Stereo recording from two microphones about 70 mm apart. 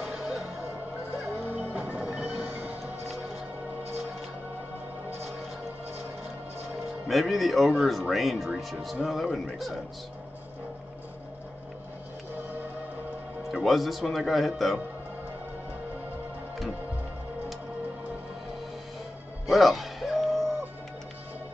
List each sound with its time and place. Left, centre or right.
0.1 s music: centre
1.7 s music: right
7.1 s speech: centre
13.5 s speech: centre
19.5 s a sound: centre